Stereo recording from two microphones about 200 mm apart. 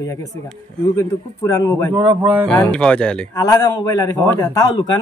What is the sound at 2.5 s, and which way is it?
Speech, 5° left (ahead or behind).